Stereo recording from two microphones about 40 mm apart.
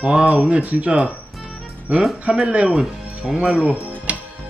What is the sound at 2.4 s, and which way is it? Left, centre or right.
Speech, right.